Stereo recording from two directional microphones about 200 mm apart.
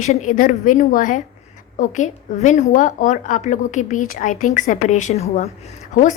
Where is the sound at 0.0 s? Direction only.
40° left (ahead or behind).